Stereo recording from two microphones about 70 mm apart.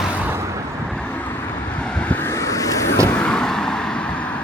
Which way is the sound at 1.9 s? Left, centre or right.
Centre.